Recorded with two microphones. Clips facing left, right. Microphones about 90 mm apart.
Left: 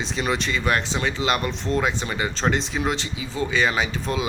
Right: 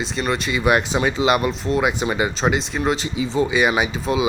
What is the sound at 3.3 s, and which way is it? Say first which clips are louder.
Speech: right 4 dB; 15° right (ahead or behind).